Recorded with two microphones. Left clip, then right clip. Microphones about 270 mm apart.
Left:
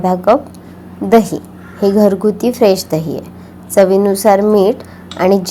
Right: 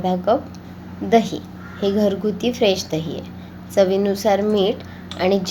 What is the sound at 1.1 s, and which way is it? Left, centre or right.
A woman's voice, left.